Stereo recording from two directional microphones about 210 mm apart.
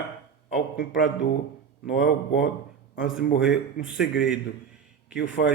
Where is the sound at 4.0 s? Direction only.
50° left (ahead or behind).